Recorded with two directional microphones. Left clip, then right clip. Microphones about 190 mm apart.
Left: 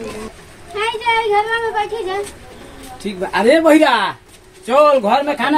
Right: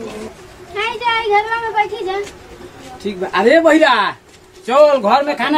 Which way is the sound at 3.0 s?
30° left (ahead or behind).